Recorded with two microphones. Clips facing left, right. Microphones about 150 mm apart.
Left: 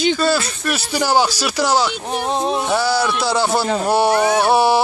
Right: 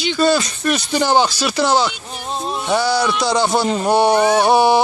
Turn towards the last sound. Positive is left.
turn(degrees=5)  # may be behind; listen again after turning